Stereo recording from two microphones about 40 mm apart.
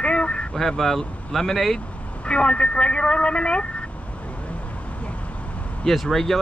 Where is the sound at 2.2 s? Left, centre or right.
Left.